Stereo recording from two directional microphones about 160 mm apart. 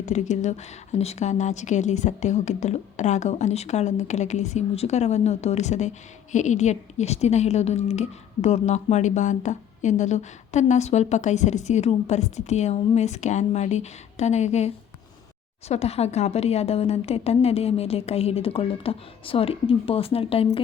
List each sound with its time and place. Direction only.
0.0 s a woman's voice: 45° left (ahead or behind)
15.7 s a woman's voice: 40° left (ahead or behind)